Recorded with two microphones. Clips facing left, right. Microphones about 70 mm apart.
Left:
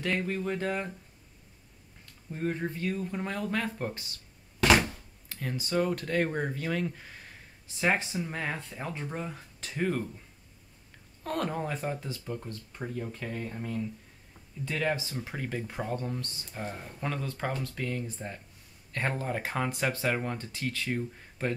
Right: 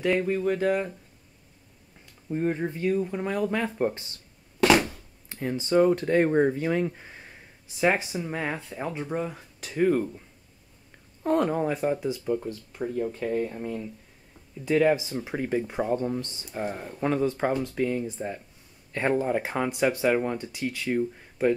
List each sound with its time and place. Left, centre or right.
0.0 s speech: centre
2.3 s speech: centre
4.6 s a sound: centre
5.3 s speech: right
11.2 s speech: centre